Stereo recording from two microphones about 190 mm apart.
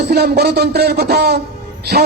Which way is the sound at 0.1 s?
55° right (ahead or behind).